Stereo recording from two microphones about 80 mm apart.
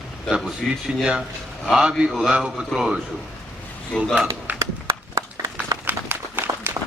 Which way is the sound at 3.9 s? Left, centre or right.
Centre.